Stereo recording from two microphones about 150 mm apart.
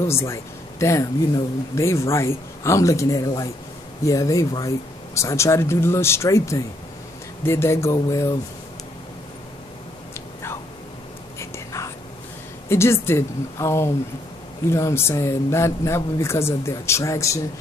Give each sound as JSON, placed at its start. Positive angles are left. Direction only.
{"t": 0.0, "sound": "speech", "side_deg": 20}
{"t": 11.3, "sound": "whispering", "side_deg": 20}
{"t": 12.6, "sound": "speech", "side_deg": 15}